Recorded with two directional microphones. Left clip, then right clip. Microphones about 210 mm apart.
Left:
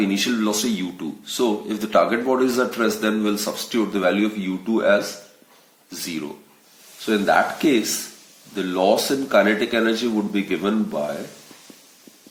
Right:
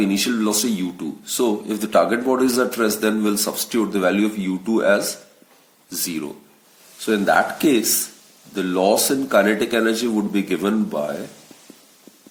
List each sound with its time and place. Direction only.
0.0 s speech: 30° right (ahead or behind)